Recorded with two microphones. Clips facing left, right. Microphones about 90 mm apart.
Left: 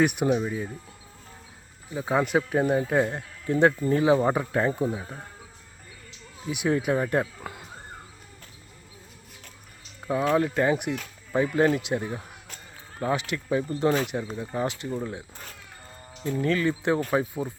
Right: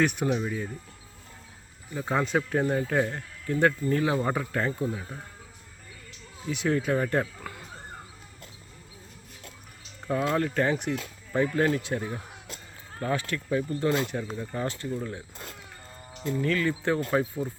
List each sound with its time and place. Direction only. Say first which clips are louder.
0.0 s speech: left 3 dB; 15° left (ahead or behind)
1.9 s speech: left 3 dB; 10° left (ahead or behind)
6.5 s speech: left 1 dB; 15° left (ahead or behind)
7.5 s a sound: left 2 dB; 25° left (ahead or behind)
10.1 s speech: left 3 dB; 10° left (ahead or behind)
14.8 s speech: left 1 dB; 30° left (ahead or behind)
16.3 s speech: left 2 dB; 25° left (ahead or behind)